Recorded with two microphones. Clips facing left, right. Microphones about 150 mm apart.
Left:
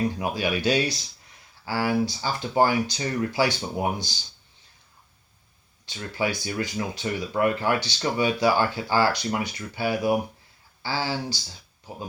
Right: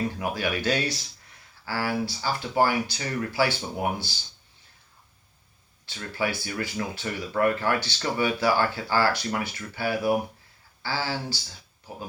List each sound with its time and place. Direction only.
0.2 s speech: 15° left (ahead or behind)
5.8 s speech: 15° left (ahead or behind)